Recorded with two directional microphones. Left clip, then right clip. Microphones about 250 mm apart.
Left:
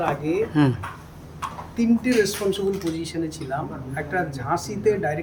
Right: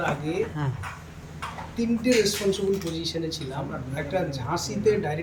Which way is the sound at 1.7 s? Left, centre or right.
Centre.